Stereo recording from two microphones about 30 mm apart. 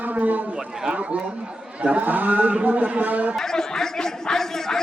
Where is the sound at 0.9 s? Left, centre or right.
Right.